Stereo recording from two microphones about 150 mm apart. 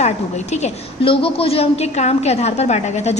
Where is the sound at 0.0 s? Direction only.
50° left (ahead or behind).